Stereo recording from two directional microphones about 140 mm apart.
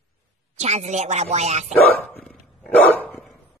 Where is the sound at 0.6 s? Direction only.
55° right (ahead or behind).